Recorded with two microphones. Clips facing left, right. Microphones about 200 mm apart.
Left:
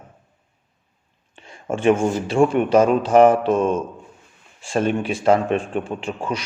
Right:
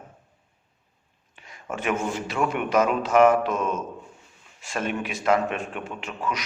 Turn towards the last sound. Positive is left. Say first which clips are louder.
# left 4 dB
turn(degrees=30)  # may be behind; listen again after turning